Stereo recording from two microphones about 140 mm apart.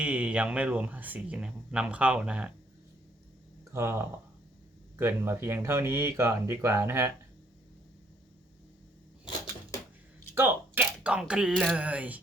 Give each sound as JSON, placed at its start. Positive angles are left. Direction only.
{"t": 0.0, "sound": "speech", "side_deg": -10}
{"t": 3.7, "sound": "speech", "side_deg": -20}
{"t": 10.3, "sound": "a sound", "side_deg": -15}
{"t": 11.7, "sound": "speech", "side_deg": -10}